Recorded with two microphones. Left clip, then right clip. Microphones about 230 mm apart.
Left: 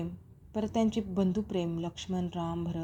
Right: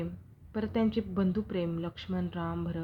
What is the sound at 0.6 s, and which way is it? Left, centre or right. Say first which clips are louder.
Speech: even; right.